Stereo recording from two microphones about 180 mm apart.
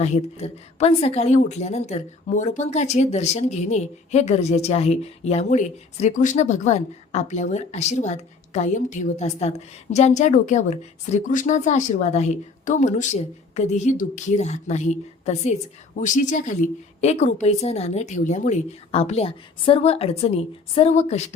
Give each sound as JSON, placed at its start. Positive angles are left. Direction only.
{"t": 0.0, "sound": "a woman's voice", "side_deg": 35}